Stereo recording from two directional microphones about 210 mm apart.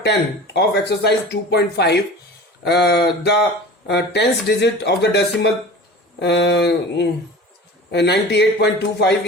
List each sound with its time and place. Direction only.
0.0 s speech: 55° left (ahead or behind)